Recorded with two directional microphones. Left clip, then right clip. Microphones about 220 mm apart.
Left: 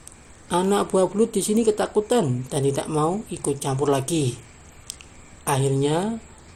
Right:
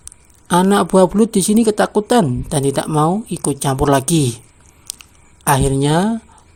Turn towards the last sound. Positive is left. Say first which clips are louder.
# right 6 dB
turn(degrees=-45)  # may be behind; listen again after turning